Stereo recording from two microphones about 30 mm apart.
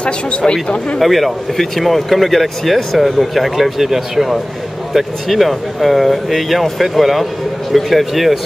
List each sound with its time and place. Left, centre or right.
0.5 s speech: left
0.9 s speech: centre